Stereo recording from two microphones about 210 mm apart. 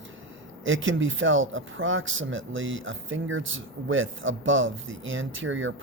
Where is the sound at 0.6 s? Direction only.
65° right (ahead or behind).